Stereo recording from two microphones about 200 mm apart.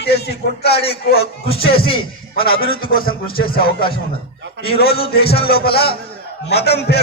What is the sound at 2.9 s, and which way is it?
Speech, 45° left (ahead or behind).